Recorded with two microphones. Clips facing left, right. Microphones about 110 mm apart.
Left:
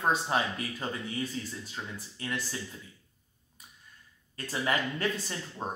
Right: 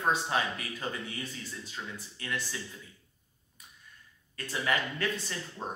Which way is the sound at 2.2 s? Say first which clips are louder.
Left 2 dB; 30° left (ahead or behind).